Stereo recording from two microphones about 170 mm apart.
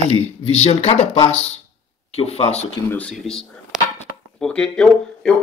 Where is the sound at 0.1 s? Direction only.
40° left (ahead or behind).